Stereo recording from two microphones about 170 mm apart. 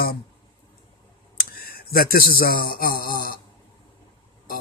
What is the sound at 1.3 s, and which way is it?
Speech, 60° left (ahead or behind).